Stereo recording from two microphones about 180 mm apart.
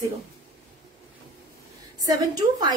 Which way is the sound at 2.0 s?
20° right (ahead or behind).